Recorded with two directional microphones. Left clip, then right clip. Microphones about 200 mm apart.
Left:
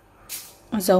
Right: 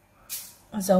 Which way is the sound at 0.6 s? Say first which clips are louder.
Left 4 dB; 45° left (ahead or behind).